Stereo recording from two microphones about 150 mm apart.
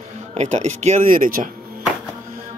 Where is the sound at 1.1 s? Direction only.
65° right (ahead or behind).